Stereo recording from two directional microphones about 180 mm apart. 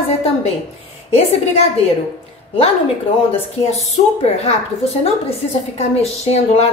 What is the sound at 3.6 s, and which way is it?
A woman's voice, 35° left (ahead or behind).